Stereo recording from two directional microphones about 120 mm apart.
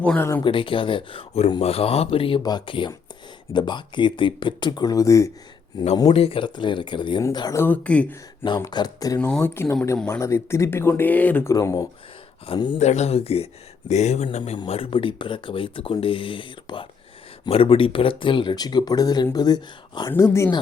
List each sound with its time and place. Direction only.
0.0 s speech: 10° left (ahead or behind)
0.4 s speech: 45° left (ahead or behind)
2.4 s speech: 35° left (ahead or behind)
6.1 s speech: 50° left (ahead or behind)
7.5 s speech: 15° left (ahead or behind)
8.6 s speech: 35° left (ahead or behind)
9.1 s speech: 10° left (ahead or behind)
11.4 s speech: 25° left (ahead or behind)
12.5 s speech: 40° left (ahead or behind)
12.8 s a man's voice: 70° left (ahead or behind)
14.7 s speech: 50° left (ahead or behind)
20.1 s speech: 25° left (ahead or behind)